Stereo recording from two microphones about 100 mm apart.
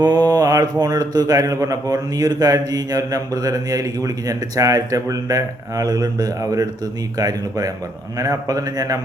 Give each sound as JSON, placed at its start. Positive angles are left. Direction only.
{"t": 0.0, "sound": "a man's voice", "side_deg": -40}